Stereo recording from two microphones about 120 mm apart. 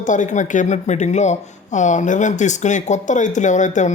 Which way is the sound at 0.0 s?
90° left.